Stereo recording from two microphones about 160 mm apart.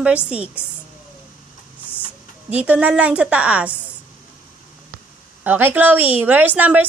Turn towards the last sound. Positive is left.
turn(degrees=-10)  # may be behind; listen again after turning